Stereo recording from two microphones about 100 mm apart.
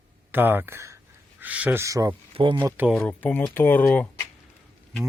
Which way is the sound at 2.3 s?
55° right (ahead or behind).